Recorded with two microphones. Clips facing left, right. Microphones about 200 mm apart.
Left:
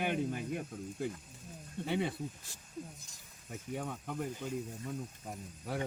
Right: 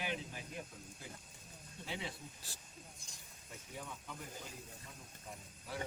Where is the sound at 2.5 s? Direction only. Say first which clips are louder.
Even; 35° right (ahead or behind).